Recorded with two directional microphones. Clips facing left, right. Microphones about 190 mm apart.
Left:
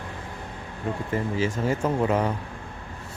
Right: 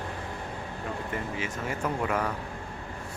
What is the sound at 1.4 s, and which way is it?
Speech, 30° left (ahead or behind).